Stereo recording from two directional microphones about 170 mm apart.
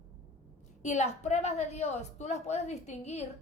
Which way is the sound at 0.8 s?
40° left (ahead or behind).